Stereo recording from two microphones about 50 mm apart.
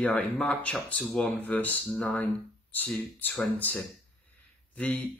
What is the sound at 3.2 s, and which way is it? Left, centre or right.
Speech, left.